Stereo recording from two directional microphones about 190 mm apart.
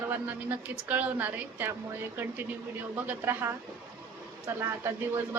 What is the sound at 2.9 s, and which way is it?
Speech, 10° right (ahead or behind).